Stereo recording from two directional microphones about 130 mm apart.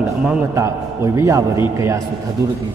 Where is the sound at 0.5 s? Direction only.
20° right (ahead or behind).